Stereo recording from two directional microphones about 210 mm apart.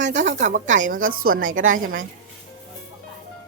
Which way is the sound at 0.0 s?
60° right (ahead or behind).